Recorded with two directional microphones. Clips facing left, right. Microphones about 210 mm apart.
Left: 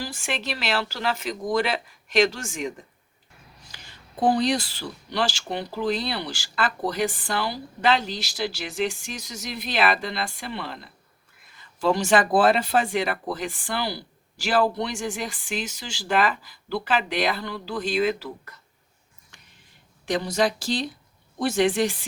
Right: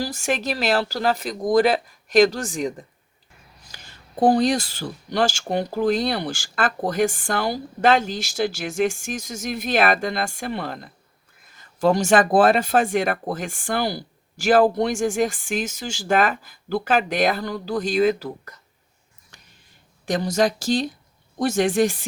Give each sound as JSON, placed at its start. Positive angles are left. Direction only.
{"t": 0.0, "sound": "speech", "side_deg": -40}
{"t": 20.1, "sound": "speech", "side_deg": -45}